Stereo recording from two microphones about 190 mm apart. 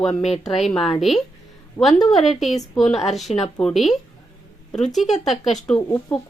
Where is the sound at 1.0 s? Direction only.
Centre (ahead or behind).